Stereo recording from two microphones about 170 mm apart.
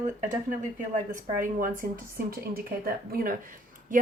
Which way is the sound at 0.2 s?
50° right (ahead or behind).